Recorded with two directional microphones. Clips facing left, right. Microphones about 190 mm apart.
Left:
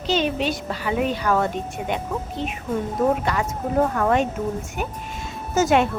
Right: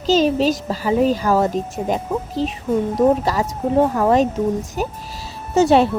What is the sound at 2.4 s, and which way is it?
Speech, 90° right.